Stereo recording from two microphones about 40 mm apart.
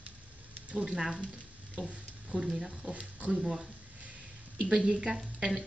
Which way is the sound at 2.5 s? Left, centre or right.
Centre.